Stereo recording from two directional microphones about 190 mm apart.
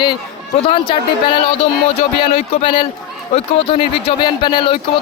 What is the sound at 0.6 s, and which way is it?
Speech, 25° left (ahead or behind).